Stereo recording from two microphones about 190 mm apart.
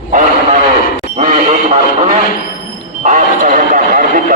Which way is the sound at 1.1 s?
35° right (ahead or behind).